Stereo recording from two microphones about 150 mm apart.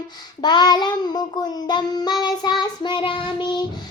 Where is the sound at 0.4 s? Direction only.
30° left (ahead or behind).